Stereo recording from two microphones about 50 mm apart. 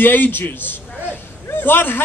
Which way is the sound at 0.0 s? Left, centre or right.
Left.